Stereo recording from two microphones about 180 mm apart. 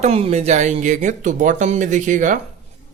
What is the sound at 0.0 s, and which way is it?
Speech, 35° right (ahead or behind).